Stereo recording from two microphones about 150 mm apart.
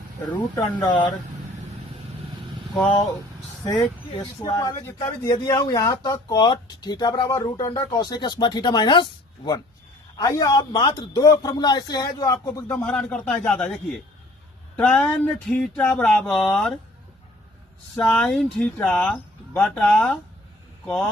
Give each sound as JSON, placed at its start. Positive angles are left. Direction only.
{"t": 0.5, "sound": "a man's voice", "side_deg": 20}
{"t": 3.8, "sound": "a man's voice", "side_deg": 25}
{"t": 12.7, "sound": "a man's voice", "side_deg": 10}
{"t": 14.8, "sound": "speech", "side_deg": 5}
{"t": 18.0, "sound": "speech", "side_deg": 5}